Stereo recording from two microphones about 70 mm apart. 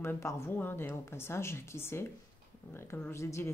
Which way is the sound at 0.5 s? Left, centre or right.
Left.